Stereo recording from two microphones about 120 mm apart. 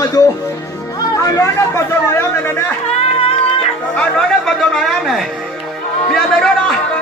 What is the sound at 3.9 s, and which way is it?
Speech, 5° left (ahead or behind).